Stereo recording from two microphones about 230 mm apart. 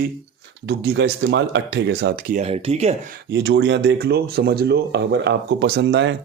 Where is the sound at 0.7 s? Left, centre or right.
Right.